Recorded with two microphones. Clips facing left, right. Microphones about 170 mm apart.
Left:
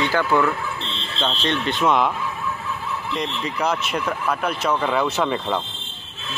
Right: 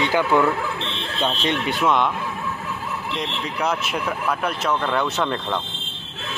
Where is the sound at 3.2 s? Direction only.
Centre (ahead or behind).